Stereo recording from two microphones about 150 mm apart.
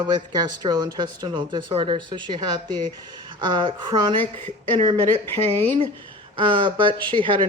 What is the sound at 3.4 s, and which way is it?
Speech, 30° right (ahead or behind).